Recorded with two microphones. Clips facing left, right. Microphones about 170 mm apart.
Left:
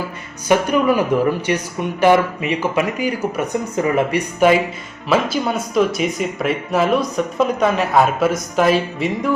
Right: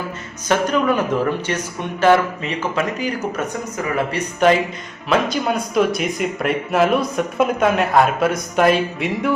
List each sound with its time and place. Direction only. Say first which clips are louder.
0.4 s speech: left 2 dB; 10° left (ahead or behind)
3.8 s speech: left 5 dB; 25° left (ahead or behind)
4.1 s speech: right 1 dB; 10° left (ahead or behind)